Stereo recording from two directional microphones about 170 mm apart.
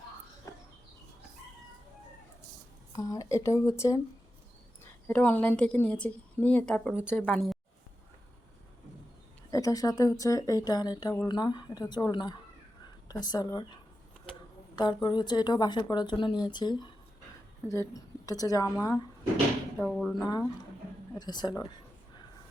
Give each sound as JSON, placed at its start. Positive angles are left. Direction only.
{"t": 0.5, "sound": "a sound", "side_deg": 20}
{"t": 2.9, "sound": "a woman's voice", "side_deg": 20}
{"t": 9.5, "sound": "speech", "side_deg": 20}
{"t": 14.8, "sound": "speech", "side_deg": 25}
{"t": 19.8, "sound": "speech", "side_deg": 5}
{"t": 20.2, "sound": "speech", "side_deg": 20}